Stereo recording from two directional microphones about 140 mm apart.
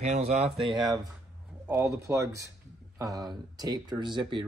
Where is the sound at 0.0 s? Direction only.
50° right (ahead or behind).